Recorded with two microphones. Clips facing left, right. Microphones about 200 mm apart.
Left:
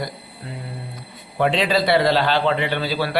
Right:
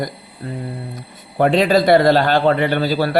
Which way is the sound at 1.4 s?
45° right (ahead or behind).